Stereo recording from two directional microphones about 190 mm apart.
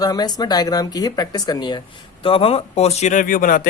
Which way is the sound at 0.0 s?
20° left (ahead or behind).